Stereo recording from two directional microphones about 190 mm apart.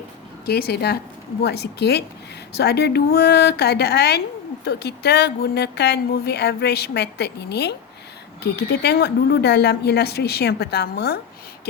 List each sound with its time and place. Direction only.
0.4 s a woman's voice: 55° left (ahead or behind)